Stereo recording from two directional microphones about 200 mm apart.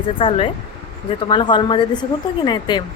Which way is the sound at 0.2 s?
25° left (ahead or behind).